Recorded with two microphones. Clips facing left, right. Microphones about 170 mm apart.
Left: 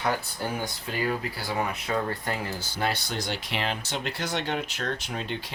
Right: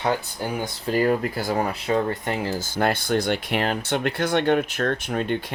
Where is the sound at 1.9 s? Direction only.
25° right (ahead or behind).